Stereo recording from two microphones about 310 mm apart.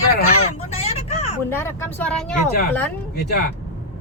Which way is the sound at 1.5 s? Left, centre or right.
Centre.